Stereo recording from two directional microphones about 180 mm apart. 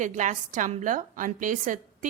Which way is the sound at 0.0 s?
45° right (ahead or behind).